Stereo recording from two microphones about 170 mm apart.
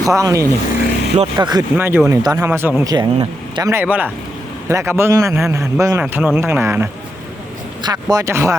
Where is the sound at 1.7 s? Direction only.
10° right (ahead or behind).